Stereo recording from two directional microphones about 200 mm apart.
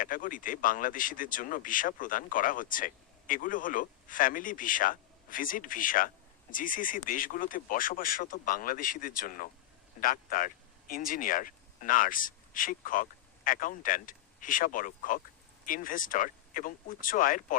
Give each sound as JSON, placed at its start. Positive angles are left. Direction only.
{"t": 0.0, "sound": "speech", "side_deg": 40}